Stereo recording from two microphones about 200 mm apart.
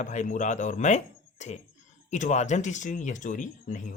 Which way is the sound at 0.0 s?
40° left (ahead or behind).